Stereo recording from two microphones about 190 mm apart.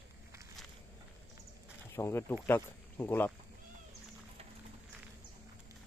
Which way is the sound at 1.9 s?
15° left (ahead or behind).